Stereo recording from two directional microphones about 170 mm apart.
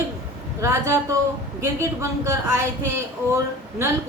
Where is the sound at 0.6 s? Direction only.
15° right (ahead or behind).